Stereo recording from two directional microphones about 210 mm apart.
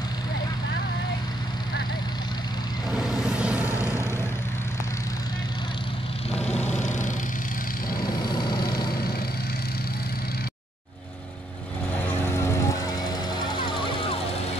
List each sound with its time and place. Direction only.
3.0 s a sound: centre (ahead or behind)
3.6 s vehicle: 15° left (ahead or behind)
6.5 s vehicle: 5° left (ahead or behind)
6.8 s vehicle: 35° left (ahead or behind)
8.0 s vehicle: 20° left (ahead or behind)